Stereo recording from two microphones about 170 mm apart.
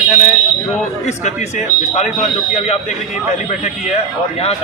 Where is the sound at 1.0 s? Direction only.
45° left (ahead or behind).